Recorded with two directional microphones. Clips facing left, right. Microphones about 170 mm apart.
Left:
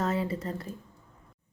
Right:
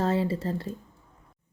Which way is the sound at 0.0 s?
30° right (ahead or behind).